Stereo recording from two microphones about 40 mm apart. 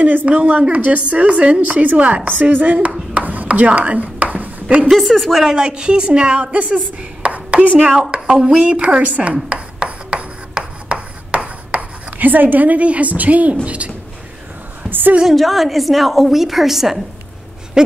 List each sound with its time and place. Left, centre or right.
0.0 s a woman's voice: right
3.2 s a sound: right
4.8 s a woman's voice: centre
5.4 s a woman's voice: centre; by 7.9 s right
7.9 s a woman's voice: centre
8.5 s a woman's voice: right
9.3 s speech: right
9.8 s writing: right
10.9 s writing: right
12.3 s a woman's voice: right
14.9 s a sound: right
15.3 s a woman's voice: centre
17.8 s owl: centre